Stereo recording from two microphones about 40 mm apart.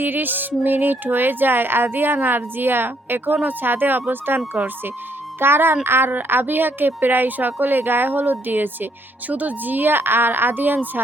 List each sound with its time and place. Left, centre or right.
0.0 s a woman's voice: right
4.4 s speech: right
5.4 s speech: right
6.1 s a woman's voice: right